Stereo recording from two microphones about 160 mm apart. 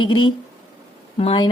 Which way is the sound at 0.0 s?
30° left (ahead or behind).